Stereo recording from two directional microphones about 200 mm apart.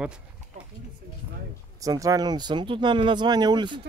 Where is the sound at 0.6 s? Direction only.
35° right (ahead or behind).